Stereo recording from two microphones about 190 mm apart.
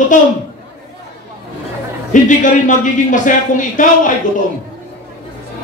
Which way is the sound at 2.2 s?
40° left (ahead or behind).